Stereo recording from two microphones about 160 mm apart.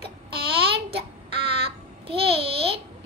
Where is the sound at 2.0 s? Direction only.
35° right (ahead or behind).